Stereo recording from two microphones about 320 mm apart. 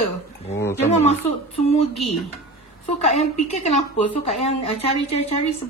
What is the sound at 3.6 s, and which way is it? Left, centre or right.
A woman's voice, left.